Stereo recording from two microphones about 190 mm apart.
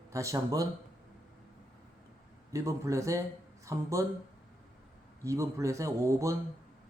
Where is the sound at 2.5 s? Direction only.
15° right (ahead or behind).